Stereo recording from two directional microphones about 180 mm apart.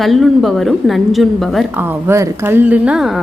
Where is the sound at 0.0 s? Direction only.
Centre (ahead or behind).